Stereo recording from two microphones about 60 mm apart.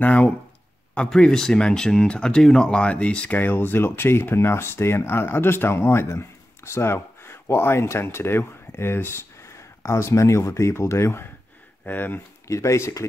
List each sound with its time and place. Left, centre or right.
0.0 s speech: left
0.9 s speech: centre
3.3 s speech: left
11.8 s speech: left
12.4 s speech: left